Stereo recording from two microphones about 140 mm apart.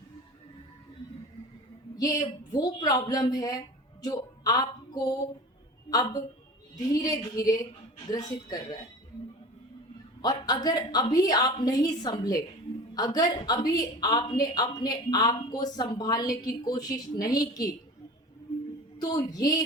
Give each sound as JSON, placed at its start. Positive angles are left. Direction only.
{"t": 2.0, "sound": "speech", "side_deg": 25}
{"t": 10.2, "sound": "speech", "side_deg": 30}
{"t": 18.9, "sound": "speech", "side_deg": 30}